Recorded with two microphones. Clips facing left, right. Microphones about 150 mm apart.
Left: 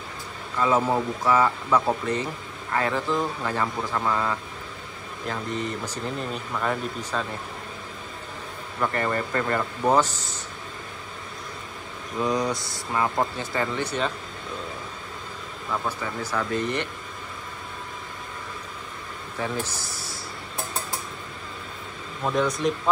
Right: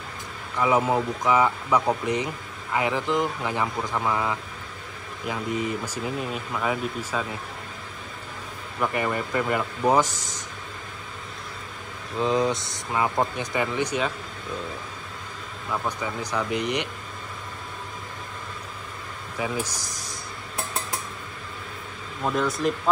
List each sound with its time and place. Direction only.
0.6 s speech: 15° right (ahead or behind)
8.8 s speech: 10° right (ahead or behind)
12.2 s speech: 25° right (ahead or behind)
15.7 s speech: 10° right (ahead or behind)
19.3 s speech: 10° right (ahead or behind)
22.2 s speech: centre (ahead or behind)